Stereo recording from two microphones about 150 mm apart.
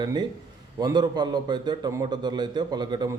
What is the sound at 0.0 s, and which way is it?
A man's voice, 30° right (ahead or behind).